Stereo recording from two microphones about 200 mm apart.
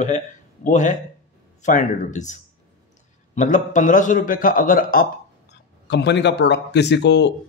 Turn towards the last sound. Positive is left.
turn(degrees=60)  # may be behind; listen again after turning